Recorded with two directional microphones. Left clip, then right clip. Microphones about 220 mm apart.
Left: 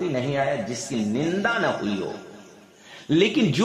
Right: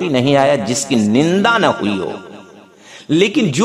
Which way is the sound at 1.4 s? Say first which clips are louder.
Right 10 dB; 35° right (ahead or behind).